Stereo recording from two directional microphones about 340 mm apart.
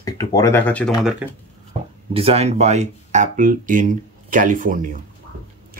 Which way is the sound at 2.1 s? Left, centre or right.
Centre.